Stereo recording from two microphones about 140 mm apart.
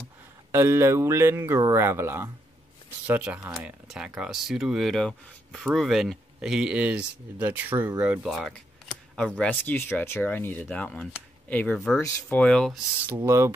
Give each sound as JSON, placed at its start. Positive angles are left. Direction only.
{"t": 0.5, "sound": "speech", "side_deg": -15}
{"t": 13.0, "sound": "speech", "side_deg": -15}